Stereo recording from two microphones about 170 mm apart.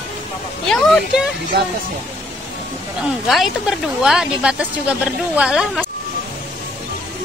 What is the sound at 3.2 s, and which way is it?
Speech, centre (ahead or behind).